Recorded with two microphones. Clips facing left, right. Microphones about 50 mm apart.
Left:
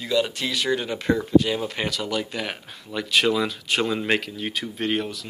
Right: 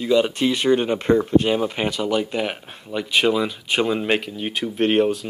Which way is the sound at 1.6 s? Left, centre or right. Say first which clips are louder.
Right 5 dB; right.